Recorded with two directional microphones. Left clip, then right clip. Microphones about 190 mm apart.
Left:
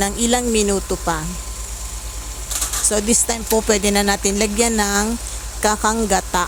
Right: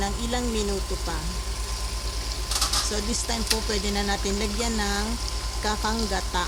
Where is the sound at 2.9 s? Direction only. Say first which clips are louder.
Left 9 dB; 45° left (ahead or behind).